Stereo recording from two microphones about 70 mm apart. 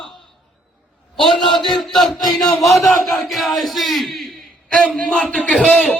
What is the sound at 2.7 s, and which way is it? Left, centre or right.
Speech, centre.